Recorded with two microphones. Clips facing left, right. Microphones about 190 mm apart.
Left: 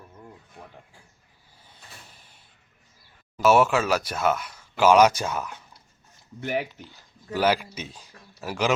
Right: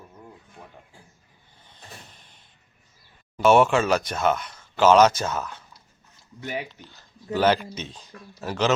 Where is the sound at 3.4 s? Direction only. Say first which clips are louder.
Right 2 dB; 5° left (ahead or behind).